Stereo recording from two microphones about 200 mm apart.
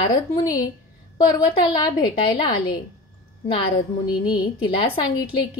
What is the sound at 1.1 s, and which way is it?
Speech, 25° left (ahead or behind).